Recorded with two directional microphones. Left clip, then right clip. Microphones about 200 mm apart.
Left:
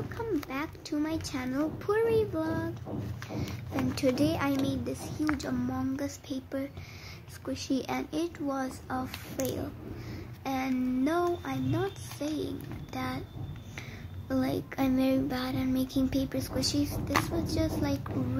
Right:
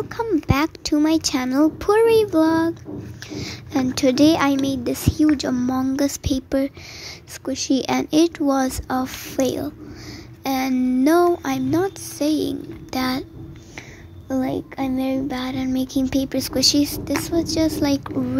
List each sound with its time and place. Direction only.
0.2 s a child's voice: 45° right (ahead or behind)
5.4 s child singing: 35° right (ahead or behind)
14.3 s child singing: 30° right (ahead or behind)